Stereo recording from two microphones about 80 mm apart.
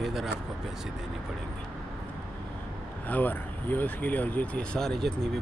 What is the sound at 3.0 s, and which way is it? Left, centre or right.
Speech, left.